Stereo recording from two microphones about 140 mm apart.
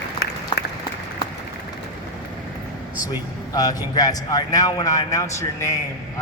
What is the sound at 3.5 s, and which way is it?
A man's voice, 25° left (ahead or behind).